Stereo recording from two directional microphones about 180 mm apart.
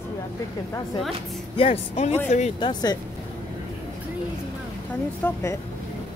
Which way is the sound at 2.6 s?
25° left (ahead or behind).